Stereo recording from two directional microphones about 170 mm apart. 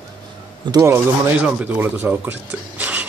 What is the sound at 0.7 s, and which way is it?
Speech, 20° right (ahead or behind).